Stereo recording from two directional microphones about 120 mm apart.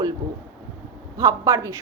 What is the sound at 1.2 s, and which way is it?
Speech, 30° right (ahead or behind).